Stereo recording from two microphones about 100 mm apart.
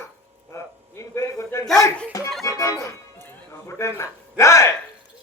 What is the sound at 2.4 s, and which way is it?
Music, 30° left (ahead or behind).